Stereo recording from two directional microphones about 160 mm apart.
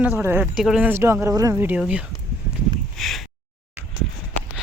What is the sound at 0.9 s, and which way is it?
Speech, 15° right (ahead or behind).